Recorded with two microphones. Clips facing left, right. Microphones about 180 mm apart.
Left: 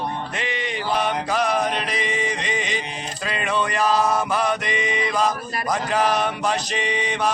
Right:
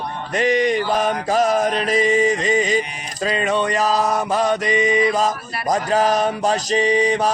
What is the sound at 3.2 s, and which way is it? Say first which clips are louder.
Mantra: right 5 dB; 40° right (ahead or behind).